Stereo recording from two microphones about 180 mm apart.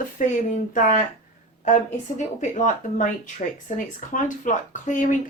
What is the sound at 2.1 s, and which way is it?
Speech, 45° left (ahead or behind).